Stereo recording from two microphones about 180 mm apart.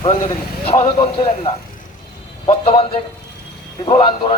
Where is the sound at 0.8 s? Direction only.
30° left (ahead or behind).